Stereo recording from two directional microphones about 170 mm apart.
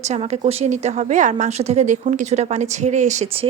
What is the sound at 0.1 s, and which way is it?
A woman's voice, 40° right (ahead or behind).